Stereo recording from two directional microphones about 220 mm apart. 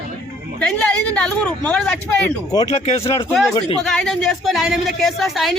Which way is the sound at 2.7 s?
25° left (ahead or behind).